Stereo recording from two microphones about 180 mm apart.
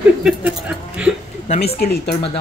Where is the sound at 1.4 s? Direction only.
35° left (ahead or behind).